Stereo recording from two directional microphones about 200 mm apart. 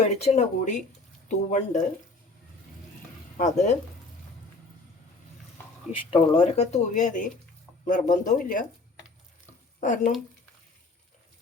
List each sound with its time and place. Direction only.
0.2 s speech: 35° left (ahead or behind)
3.3 s speech: 40° left (ahead or behind)
5.9 s speech: 25° left (ahead or behind); by 8.6 s 40° left (ahead or behind)
9.8 s speech: 40° left (ahead or behind)